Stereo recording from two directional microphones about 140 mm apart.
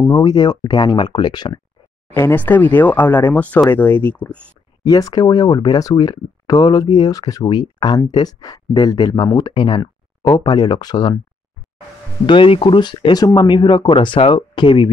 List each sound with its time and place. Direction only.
0.0 s speech: 25° left (ahead or behind)
2.1 s speech: 15° left (ahead or behind)
4.8 s speech: 25° left (ahead or behind)
12.3 s speech: 40° left (ahead or behind)